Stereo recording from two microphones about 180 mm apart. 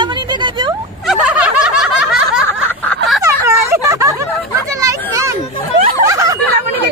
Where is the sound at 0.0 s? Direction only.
25° right (ahead or behind).